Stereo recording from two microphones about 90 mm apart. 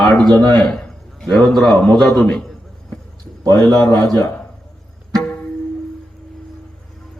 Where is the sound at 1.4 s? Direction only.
10° left (ahead or behind).